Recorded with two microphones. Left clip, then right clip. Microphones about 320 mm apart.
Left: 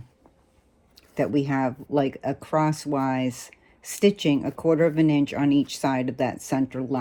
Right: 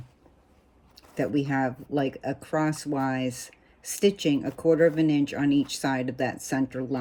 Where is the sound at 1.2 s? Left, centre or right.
Left.